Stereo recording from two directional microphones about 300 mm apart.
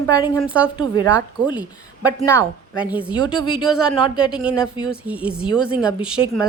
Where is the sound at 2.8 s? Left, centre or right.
Centre.